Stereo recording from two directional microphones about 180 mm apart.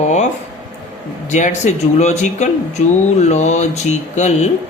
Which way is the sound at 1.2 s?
40° left (ahead or behind).